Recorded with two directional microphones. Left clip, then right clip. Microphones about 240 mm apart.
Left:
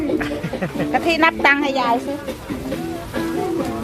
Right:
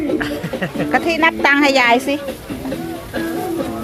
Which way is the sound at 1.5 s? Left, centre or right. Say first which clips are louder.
Right 6 dB; right.